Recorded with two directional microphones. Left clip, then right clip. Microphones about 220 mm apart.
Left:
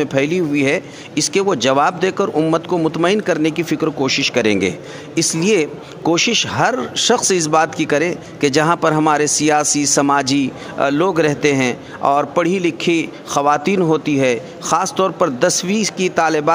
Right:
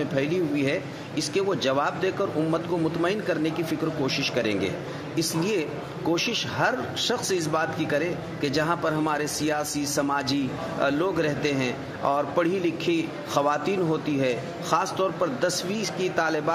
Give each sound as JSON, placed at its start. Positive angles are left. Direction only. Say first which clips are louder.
{"t": 0.0, "sound": "speech", "louder": "left 9 dB", "side_deg": 50}